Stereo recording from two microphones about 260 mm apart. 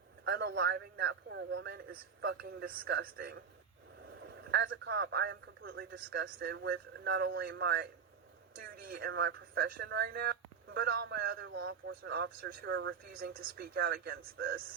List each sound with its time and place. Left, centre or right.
0.3 s a man's voice: right
4.0 s a man's voice: right
8.9 s a man's voice: right
11.7 s speech: right
12.1 s a man's voice: right
13.1 s a man's voice: right